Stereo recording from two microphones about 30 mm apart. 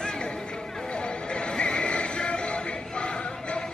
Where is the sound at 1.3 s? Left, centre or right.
Left.